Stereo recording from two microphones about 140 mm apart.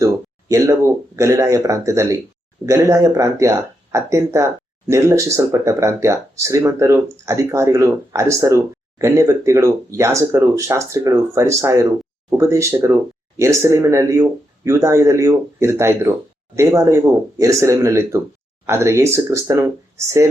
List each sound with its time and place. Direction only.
0.0 s speech: 25° right (ahead or behind)